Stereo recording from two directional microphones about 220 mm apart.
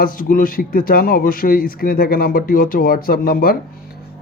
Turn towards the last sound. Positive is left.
turn(degrees=40)  # may be behind; listen again after turning